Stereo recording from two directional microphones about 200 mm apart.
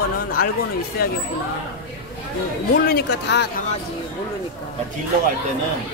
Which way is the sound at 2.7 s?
55° left (ahead or behind).